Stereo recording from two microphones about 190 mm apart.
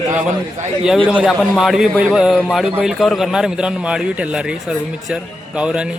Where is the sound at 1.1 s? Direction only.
5° right (ahead or behind).